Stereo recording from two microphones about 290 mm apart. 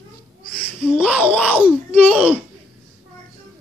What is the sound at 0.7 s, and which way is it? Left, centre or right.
A child's voice, centre.